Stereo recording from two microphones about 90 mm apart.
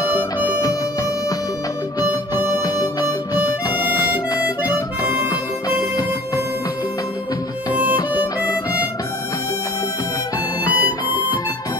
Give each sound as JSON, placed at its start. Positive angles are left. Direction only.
{"t": 2.0, "sound": "music", "side_deg": 45}
{"t": 2.6, "sound": "harmonica", "side_deg": 45}
{"t": 4.4, "sound": "harmonica", "side_deg": -15}
{"t": 8.2, "sound": "harmonica", "side_deg": -20}
{"t": 10.6, "sound": "music", "side_deg": 50}